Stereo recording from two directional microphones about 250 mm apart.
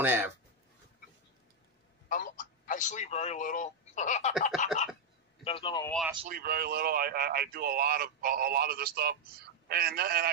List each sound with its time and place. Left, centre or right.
0.0 s speech: centre
2.0 s a man's voice: left
5.9 s speech: centre
6.2 s speech: right